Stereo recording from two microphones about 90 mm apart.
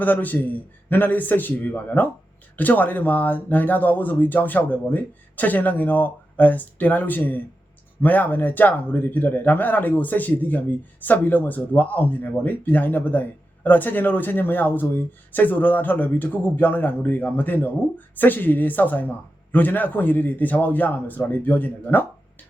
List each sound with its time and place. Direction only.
0.0 s speech: 20° left (ahead or behind)